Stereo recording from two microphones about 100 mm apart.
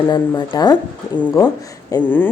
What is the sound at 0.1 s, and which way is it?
Speech, 40° left (ahead or behind).